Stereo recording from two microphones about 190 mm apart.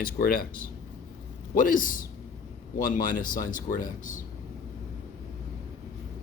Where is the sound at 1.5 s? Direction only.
45° left (ahead or behind).